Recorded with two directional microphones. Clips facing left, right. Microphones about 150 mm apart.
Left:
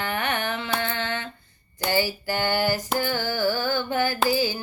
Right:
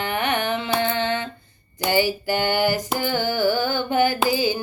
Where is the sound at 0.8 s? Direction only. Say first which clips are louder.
Right 6 dB; 20° right (ahead or behind).